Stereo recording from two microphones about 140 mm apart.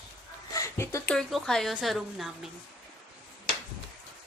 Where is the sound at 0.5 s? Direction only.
20° left (ahead or behind).